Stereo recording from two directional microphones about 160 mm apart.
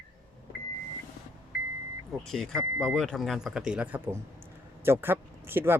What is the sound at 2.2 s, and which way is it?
A man's voice, 5° left (ahead or behind).